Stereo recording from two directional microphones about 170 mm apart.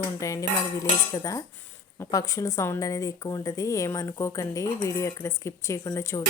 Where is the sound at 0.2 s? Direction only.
20° left (ahead or behind).